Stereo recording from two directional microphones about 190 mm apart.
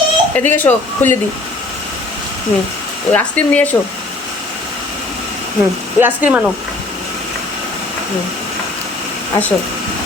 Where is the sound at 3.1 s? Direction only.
5° left (ahead or behind).